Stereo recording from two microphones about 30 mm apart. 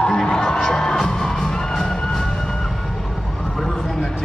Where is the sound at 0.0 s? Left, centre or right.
Left.